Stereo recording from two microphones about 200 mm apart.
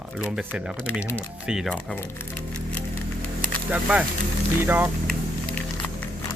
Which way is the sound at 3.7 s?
5° right (ahead or behind).